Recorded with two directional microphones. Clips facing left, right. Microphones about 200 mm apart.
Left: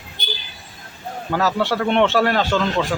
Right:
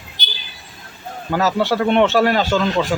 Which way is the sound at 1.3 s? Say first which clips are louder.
Right 2 dB; centre (ahead or behind).